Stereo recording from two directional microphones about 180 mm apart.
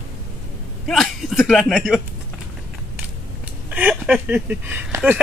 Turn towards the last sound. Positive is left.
turn(degrees=-10)  # may be behind; listen again after turning